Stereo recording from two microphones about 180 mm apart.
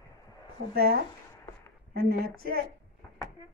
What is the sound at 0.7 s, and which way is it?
A woman's voice, 60° right (ahead or behind).